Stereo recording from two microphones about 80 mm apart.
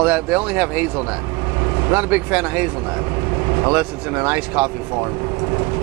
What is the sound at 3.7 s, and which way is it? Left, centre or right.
Speech, centre.